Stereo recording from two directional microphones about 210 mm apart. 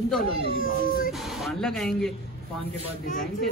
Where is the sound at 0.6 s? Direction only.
40° left (ahead or behind).